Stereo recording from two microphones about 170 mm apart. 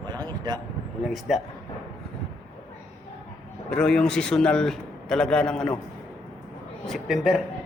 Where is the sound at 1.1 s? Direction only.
Centre (ahead or behind).